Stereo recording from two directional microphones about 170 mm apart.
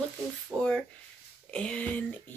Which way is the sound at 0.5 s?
10° right (ahead or behind).